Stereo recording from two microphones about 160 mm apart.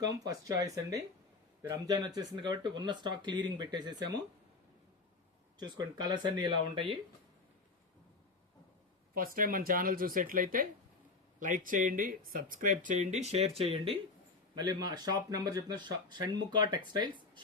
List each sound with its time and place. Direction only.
0.0 s speech: 20° right (ahead or behind)
5.5 s speech: 25° right (ahead or behind)
9.1 s speech: 60° right (ahead or behind); by 17.4 s 25° right (ahead or behind)